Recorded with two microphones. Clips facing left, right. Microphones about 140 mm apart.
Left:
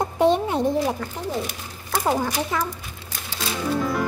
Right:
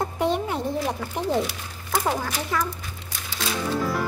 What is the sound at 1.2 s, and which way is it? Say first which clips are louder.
Speech: right 3 dB; 20° right (ahead or behind).